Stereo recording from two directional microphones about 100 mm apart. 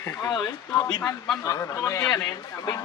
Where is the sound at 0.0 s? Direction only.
25° left (ahead or behind).